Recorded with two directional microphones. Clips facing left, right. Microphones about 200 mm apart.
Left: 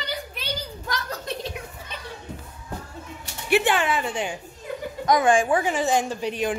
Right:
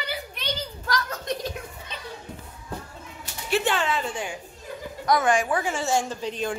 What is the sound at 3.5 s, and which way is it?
A man's voice, 15° left (ahead or behind).